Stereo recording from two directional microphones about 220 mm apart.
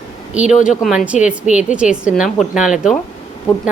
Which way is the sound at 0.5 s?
35° left (ahead or behind).